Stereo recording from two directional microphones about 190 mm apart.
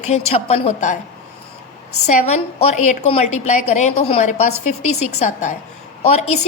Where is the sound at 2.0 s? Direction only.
35° left (ahead or behind).